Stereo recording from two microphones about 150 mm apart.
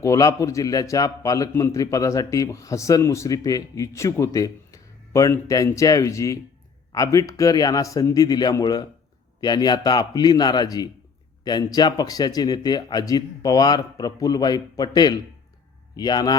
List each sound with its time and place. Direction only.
0.0 s a man's voice: 20° left (ahead or behind)